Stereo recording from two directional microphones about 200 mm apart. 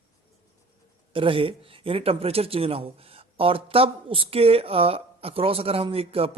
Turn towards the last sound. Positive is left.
turn(degrees=-30)  # may be behind; listen again after turning